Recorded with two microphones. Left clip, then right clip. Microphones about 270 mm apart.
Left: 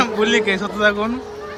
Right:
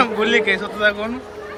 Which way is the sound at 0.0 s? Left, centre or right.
Centre.